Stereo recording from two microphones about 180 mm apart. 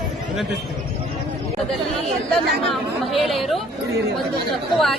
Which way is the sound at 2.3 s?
Centre (ahead or behind).